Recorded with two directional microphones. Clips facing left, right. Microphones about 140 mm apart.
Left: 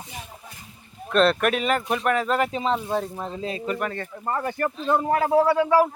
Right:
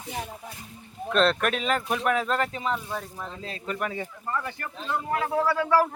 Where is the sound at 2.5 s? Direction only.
25° left (ahead or behind).